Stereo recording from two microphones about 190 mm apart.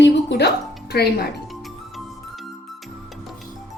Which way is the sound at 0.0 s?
65° left (ahead or behind).